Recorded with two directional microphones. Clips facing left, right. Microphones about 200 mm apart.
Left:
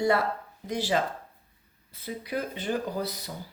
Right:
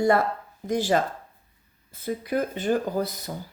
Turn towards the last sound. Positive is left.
turn(degrees=-50)  # may be behind; listen again after turning